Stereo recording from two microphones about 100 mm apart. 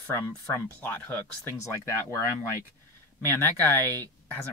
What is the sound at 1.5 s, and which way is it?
Speech, 30° left (ahead or behind).